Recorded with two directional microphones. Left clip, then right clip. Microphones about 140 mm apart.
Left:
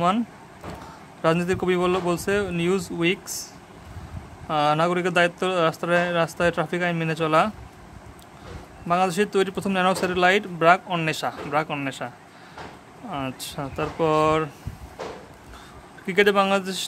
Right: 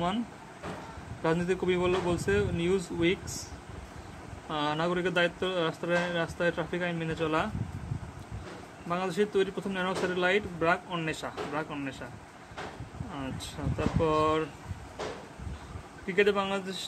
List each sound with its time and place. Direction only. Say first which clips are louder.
1.2 s speech: left 7 dB; 50° left (ahead or behind)
4.5 s speech: left 9 dB; 55° left (ahead or behind)
8.8 s speech: left 9 dB; 65° left (ahead or behind)
13.1 s speech: left 9 dB; 65° left (ahead or behind)
16.1 s a man's voice: left 8 dB; 85° left